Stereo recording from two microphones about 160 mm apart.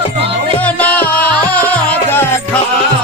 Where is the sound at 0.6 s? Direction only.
10° left (ahead or behind).